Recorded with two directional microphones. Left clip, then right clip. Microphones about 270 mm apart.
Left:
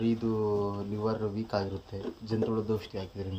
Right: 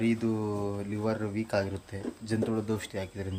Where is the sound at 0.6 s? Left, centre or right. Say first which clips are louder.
Left 1 dB; right.